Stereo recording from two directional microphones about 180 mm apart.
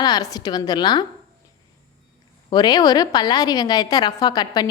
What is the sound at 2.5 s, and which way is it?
A woman's voice, 20° left (ahead or behind).